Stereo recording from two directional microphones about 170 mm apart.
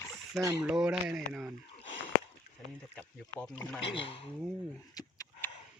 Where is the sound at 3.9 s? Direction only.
35° left (ahead or behind).